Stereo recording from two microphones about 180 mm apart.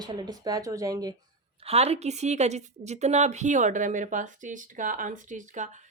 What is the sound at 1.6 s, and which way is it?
A woman's voice, 35° right (ahead or behind).